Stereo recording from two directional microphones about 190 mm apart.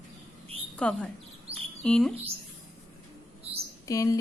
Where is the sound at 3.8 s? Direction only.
20° left (ahead or behind).